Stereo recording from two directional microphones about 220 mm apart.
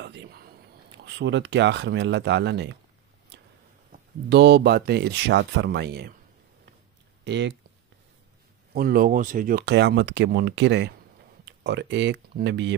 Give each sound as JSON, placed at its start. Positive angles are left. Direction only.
{"t": 0.0, "sound": "a sound", "side_deg": -45}
{"t": 0.9, "sound": "speech", "side_deg": -55}
{"t": 3.9, "sound": "speech", "side_deg": -50}
{"t": 7.2, "sound": "speech", "side_deg": -50}
{"t": 8.7, "sound": "speech", "side_deg": -40}